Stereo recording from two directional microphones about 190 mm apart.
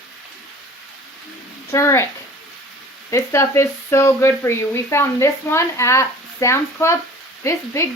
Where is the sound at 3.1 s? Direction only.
15° left (ahead or behind).